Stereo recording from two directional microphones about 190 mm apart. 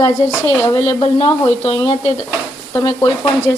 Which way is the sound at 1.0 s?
30° left (ahead or behind).